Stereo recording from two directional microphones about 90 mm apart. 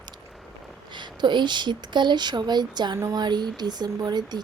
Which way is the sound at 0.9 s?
60° right (ahead or behind).